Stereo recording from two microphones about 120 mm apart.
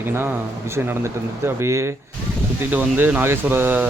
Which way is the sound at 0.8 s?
20° right (ahead or behind).